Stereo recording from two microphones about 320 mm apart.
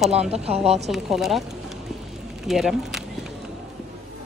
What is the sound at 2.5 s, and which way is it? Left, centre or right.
Speech, centre.